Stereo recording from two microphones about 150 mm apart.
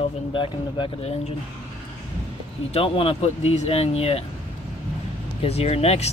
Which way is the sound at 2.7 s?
40° left (ahead or behind).